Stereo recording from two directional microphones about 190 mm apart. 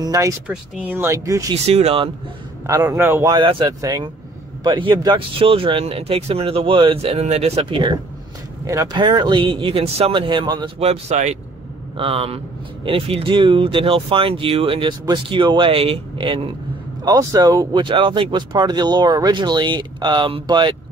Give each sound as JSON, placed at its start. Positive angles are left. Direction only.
{"t": 0.0, "sound": "speech", "side_deg": -20}
{"t": 0.5, "sound": "speech", "side_deg": -10}
{"t": 1.5, "sound": "speech", "side_deg": -30}
{"t": 2.6, "sound": "speech", "side_deg": -20}
{"t": 3.3, "sound": "speech", "side_deg": -25}
{"t": 10.8, "sound": "speech", "side_deg": -35}
{"t": 17.0, "sound": "speech", "side_deg": -20}